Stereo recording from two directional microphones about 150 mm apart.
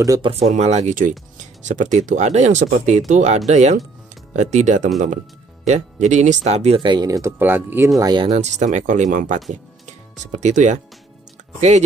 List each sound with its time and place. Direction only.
0.2 s speech: 45° right (ahead or behind)
6.8 s speech: 30° right (ahead or behind); by 7.9 s 15° right (ahead or behind)
8.0 s speech: 30° right (ahead or behind)
8.3 s speech: 50° right (ahead or behind)